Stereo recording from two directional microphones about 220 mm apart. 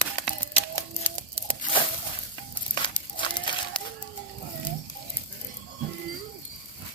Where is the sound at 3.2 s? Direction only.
20° left (ahead or behind).